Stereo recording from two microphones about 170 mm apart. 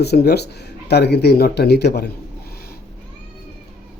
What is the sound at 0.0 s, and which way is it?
Speech, 70° left (ahead or behind).